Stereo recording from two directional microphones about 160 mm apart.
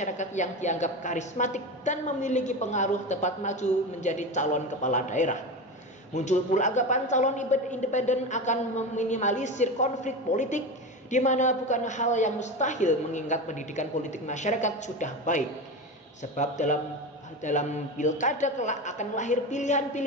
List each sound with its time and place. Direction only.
0.0 s a woman's voice: 50° left (ahead or behind)